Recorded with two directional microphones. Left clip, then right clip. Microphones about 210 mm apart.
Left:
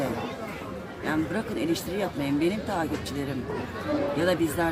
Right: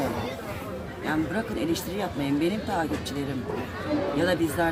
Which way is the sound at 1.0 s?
5° right (ahead or behind).